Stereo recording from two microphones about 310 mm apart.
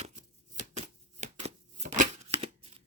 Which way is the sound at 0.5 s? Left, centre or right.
Right.